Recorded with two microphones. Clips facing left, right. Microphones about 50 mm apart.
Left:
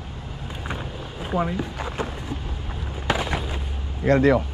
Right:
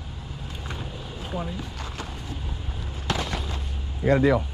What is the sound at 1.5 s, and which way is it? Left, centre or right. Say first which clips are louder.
Speech: left 6 dB; left.